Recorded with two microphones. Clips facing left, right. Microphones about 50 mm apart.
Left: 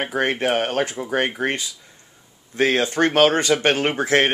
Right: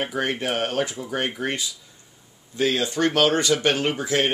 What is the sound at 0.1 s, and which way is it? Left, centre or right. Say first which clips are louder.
Speech: left 5 dB; left.